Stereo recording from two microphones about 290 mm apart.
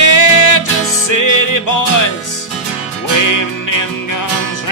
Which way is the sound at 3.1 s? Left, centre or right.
Left.